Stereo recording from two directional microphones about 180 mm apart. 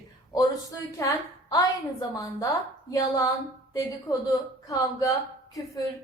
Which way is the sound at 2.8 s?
20° left (ahead or behind).